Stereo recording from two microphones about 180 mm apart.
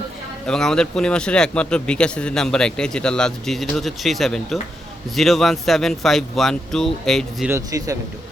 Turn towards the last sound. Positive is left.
turn(degrees=-20)  # may be behind; listen again after turning